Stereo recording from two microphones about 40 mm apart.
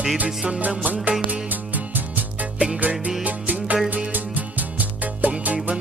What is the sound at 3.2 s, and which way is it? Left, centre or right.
Music, right.